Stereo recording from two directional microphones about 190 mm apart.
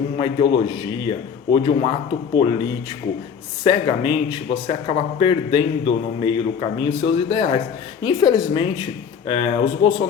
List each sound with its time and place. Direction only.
0.2 s speech: 25° left (ahead or behind)